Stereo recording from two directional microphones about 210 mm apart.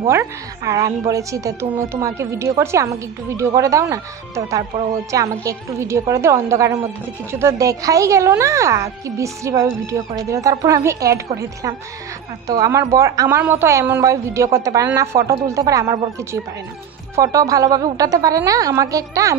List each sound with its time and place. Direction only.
0.0 s a woman's voice: 15° right (ahead or behind)
12.4 s a woman's voice: 15° right (ahead or behind)